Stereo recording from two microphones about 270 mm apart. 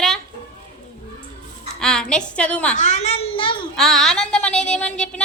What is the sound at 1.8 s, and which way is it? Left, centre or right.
Child singing, centre.